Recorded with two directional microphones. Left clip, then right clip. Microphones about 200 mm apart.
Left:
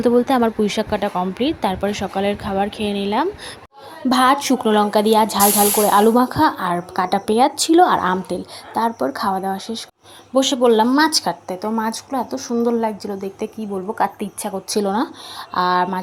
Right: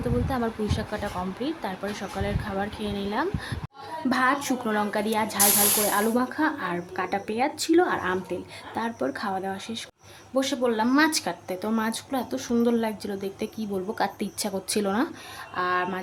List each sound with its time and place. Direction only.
0.0 s speech: 40° left (ahead or behind); by 9.8 s 15° left (ahead or behind)
10.3 s speech: 25° left (ahead or behind)
12.3 s speech: 10° right (ahead or behind)
12.6 s a woman's voice: 10° left (ahead or behind)
14.8 s speech: 10° left (ahead or behind)
15.4 s speech: 25° left (ahead or behind)